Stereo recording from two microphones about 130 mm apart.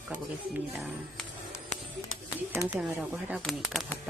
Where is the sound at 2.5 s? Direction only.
15° right (ahead or behind).